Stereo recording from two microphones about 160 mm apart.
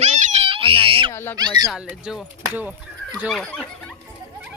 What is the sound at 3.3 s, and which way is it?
Speech, 5° left (ahead or behind).